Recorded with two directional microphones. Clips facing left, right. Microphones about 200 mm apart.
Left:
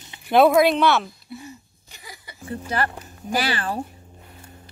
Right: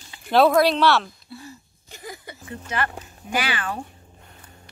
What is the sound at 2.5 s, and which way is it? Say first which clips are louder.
Speech: left 3 dB; 35° left (ahead or behind).